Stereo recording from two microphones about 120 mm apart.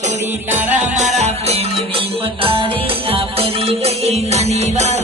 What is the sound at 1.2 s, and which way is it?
Music, 60° right (ahead or behind).